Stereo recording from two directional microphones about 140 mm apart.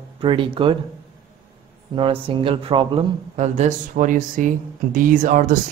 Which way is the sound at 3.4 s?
60° right (ahead or behind).